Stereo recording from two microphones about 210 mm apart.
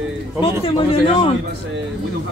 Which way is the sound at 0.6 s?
25° left (ahead or behind).